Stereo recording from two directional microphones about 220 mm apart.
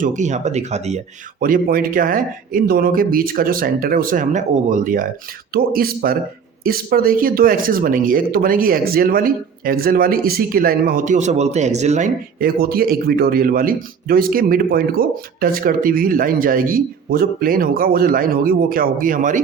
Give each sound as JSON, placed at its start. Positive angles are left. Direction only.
{"t": 0.0, "sound": "speech", "side_deg": -35}